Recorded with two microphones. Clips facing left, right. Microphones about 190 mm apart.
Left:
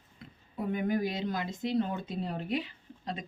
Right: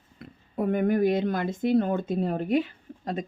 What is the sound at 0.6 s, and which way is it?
A woman's voice, 55° right (ahead or behind).